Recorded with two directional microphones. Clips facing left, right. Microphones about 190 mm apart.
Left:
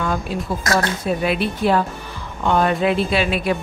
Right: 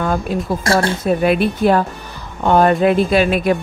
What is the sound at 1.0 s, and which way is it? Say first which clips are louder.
Speech: right 5 dB; 50° right (ahead or behind).